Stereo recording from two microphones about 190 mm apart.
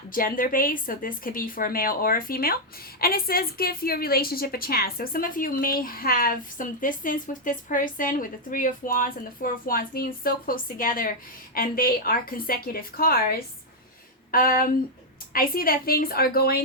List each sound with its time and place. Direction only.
0.1 s a woman's voice: 45° left (ahead or behind)
14.3 s a woman's voice: 50° left (ahead or behind)